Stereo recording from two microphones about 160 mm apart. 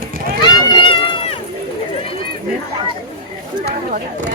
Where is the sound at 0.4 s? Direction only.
30° left (ahead or behind).